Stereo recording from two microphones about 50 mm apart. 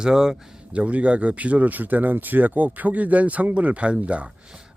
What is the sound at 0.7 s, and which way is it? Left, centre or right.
Speech, right.